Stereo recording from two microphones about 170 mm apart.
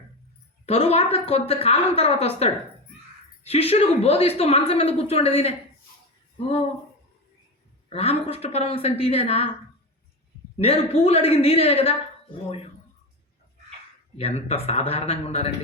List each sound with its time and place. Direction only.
0.6 s a woman's voice: 35° left (ahead or behind)
7.9 s a woman's voice: 35° left (ahead or behind)
10.6 s a woman's voice: 35° left (ahead or behind)
14.2 s a woman's voice: 40° left (ahead or behind)